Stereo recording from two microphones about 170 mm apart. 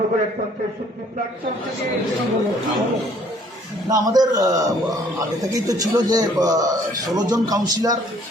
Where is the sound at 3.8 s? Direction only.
25° right (ahead or behind).